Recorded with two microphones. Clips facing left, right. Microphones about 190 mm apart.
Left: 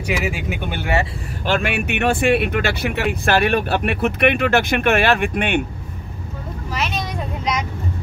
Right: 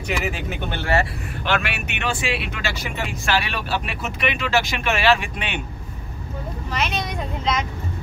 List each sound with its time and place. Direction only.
0.2 s speech: 10° left (ahead or behind)
1.4 s speech: 45° left (ahead or behind)
6.7 s speech: centre (ahead or behind)